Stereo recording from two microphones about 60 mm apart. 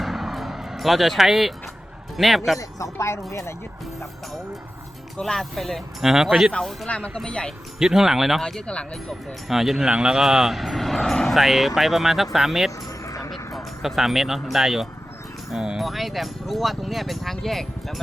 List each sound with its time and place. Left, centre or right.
0.0 s vehicle: centre
2.1 s speech: centre
2.6 s speech: left
5.1 s speech: centre
6.8 s speech: centre
7.8 s speech: centre
8.4 s speech: centre
9.5 s speech: centre
13.1 s music: left
13.8 s speech: centre
15.8 s speech: centre